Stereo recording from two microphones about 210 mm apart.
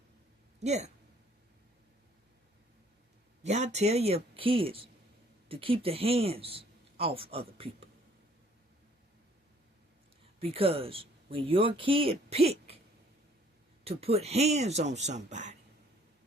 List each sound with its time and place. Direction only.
0.6 s speech: 30° right (ahead or behind)
3.4 s speech: 30° right (ahead or behind)
10.4 s speech: 25° right (ahead or behind)
13.8 s speech: 30° right (ahead or behind)